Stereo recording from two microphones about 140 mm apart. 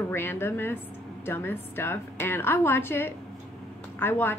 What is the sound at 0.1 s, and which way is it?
A woman's voice, 15° left (ahead or behind).